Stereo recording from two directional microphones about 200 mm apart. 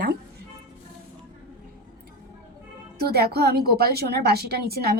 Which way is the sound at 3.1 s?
50° right (ahead or behind).